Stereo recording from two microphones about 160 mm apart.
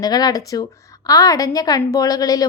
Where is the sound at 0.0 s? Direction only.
25° left (ahead or behind).